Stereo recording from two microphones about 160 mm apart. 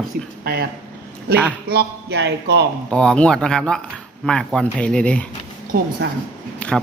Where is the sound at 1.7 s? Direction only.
90° right.